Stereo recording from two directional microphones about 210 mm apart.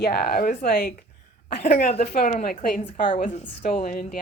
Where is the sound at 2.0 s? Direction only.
45° left (ahead or behind).